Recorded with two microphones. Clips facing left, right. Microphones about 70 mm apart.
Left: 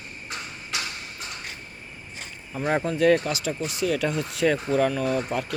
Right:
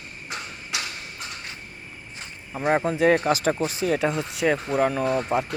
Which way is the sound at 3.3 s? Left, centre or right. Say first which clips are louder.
Right 6 dB; right.